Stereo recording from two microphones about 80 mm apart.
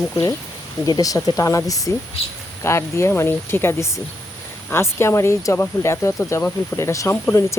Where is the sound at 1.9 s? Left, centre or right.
Left.